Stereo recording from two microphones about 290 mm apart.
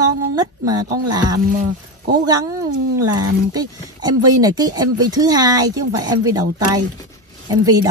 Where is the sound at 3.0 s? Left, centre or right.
Centre.